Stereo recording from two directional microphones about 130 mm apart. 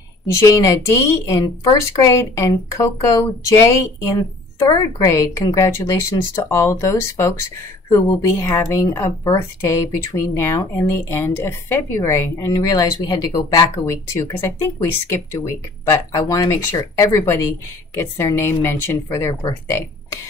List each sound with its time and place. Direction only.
0.4 s speech: 25° left (ahead or behind)
10.3 s speech: 20° left (ahead or behind)